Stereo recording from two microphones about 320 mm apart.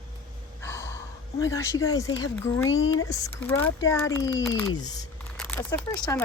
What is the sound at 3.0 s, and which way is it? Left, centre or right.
Speech, centre.